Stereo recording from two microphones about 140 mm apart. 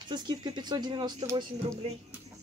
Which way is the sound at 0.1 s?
35° right (ahead or behind).